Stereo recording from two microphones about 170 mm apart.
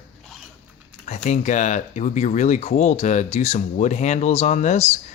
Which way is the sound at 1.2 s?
45° left (ahead or behind).